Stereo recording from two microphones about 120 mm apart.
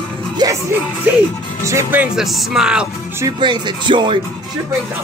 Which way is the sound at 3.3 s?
40° right (ahead or behind).